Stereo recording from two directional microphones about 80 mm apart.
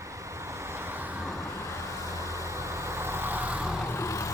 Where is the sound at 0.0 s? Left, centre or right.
Right.